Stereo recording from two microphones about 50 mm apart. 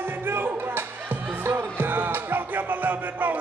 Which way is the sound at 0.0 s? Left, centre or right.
Right.